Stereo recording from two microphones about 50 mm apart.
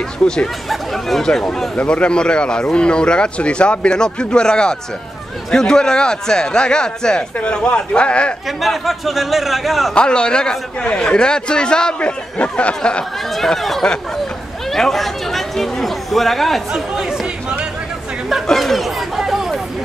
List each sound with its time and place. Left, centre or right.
0.7 s a man's voice: centre
1.8 s a man's voice: left
8.5 s a man's voice: centre
9.9 s a man's voice: centre
13.3 s a man's voice: centre
14.7 s chatter: centre
16.7 s chatter: centre
18.6 s chatter: centre